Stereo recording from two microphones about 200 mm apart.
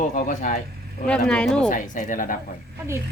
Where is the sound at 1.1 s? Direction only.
5° left (ahead or behind).